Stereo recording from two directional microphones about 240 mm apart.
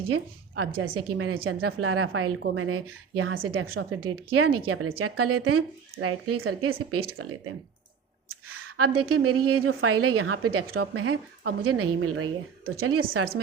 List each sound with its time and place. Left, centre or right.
0.1 s a woman's voice: right
9.0 s a woman's voice: right